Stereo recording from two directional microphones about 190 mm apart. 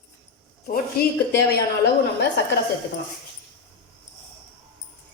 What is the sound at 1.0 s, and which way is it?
Speech, 55° left (ahead or behind).